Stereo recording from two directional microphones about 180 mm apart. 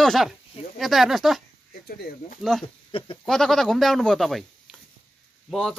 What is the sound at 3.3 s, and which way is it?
Speech, centre (ahead or behind).